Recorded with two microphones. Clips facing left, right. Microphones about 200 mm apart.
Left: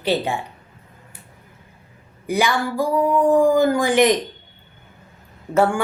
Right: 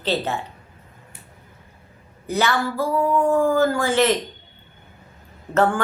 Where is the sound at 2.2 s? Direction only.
10° left (ahead or behind).